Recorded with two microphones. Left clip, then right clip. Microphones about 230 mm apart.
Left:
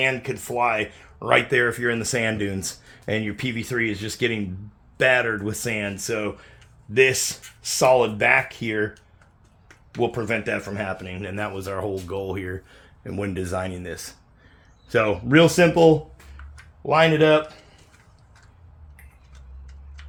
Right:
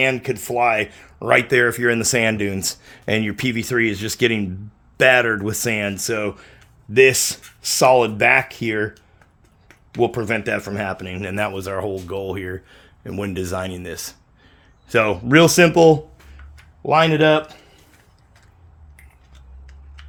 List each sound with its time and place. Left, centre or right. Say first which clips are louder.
0.0 s speech: right 4 dB; right
9.9 s speech: right 4 dB; right
11.6 s speech: right 3 dB; right